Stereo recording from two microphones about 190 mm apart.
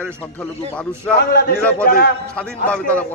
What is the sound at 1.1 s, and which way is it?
A man's voice, 55° left (ahead or behind).